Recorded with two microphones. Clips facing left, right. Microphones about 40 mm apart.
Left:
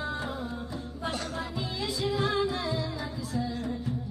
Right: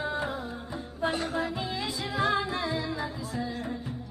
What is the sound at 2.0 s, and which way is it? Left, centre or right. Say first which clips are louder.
Music: even; centre.